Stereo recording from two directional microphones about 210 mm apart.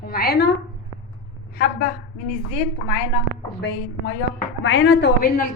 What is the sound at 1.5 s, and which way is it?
Speech, 45° left (ahead or behind).